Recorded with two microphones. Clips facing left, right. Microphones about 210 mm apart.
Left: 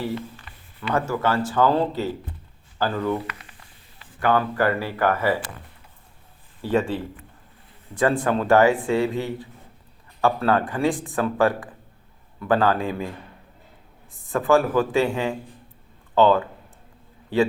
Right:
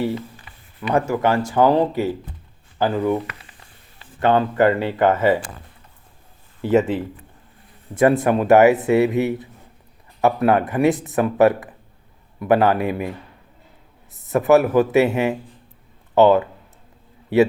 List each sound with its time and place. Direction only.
0.8 s speech: 15° right (ahead or behind)
6.6 s speech: 20° right (ahead or behind)